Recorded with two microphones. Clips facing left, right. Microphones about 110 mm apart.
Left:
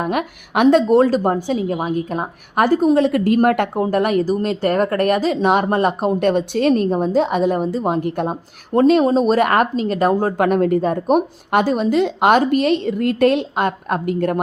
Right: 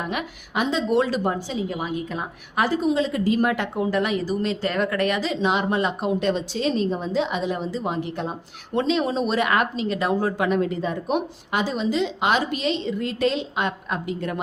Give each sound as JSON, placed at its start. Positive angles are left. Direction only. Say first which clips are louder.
{"t": 0.0, "sound": "a woman's voice", "louder": "left 8 dB", "side_deg": 50}
{"t": 0.9, "sound": "a woman's voice", "louder": "left 7 dB", "side_deg": 40}